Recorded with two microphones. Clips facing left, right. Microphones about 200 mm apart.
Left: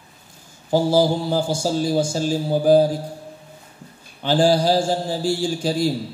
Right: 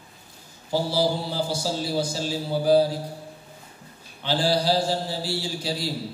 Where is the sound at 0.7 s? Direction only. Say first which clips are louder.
Left 6 dB; 50° left (ahead or behind).